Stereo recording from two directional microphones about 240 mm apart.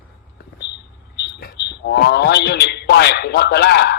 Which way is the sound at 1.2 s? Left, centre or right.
Left.